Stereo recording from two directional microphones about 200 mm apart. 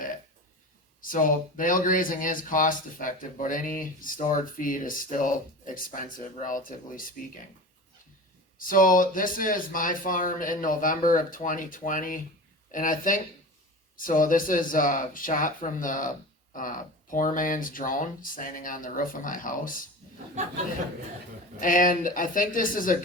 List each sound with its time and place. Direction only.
1.0 s speech: 40° left (ahead or behind)
8.5 s speech: 45° left (ahead or behind)
20.4 s speech: 35° right (ahead or behind)
21.6 s speech: 40° left (ahead or behind)